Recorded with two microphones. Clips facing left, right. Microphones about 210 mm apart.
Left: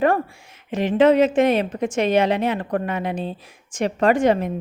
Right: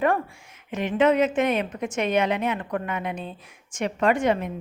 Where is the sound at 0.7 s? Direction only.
35° left (ahead or behind).